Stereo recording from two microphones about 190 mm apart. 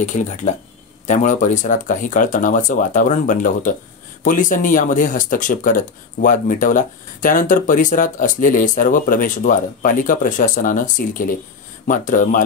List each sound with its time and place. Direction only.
0.0 s speech: 40° left (ahead or behind)